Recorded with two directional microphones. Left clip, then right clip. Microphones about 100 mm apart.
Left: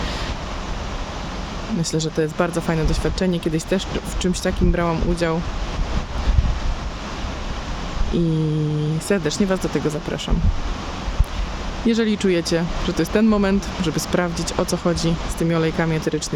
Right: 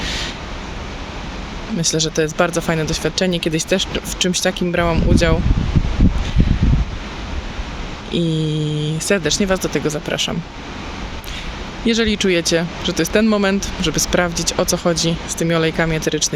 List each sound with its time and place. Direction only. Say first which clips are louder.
0.0 s a sound: right 4 dB; 15° left (ahead or behind)
1.8 s speech: right 5 dB; 15° left (ahead or behind)
8.1 s speech: right 2 dB; 15° left (ahead or behind)
11.9 s speech: right 3 dB; 15° left (ahead or behind)